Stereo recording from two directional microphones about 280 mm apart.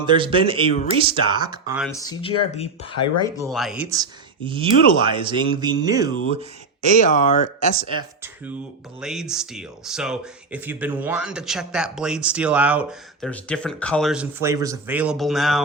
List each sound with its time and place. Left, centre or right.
0.0 s speech: centre
1.9 s speech: centre
3.4 s speech: centre
7.0 s speech: left
7.9 s speech: centre